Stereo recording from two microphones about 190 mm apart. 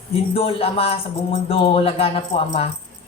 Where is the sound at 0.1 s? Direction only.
30° left (ahead or behind).